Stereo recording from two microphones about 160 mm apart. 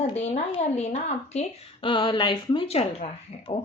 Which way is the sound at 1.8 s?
30° left (ahead or behind).